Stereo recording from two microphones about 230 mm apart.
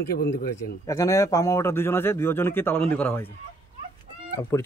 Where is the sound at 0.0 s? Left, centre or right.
Left.